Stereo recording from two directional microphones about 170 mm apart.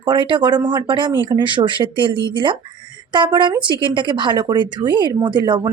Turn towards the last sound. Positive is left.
turn(degrees=-25)  # may be behind; listen again after turning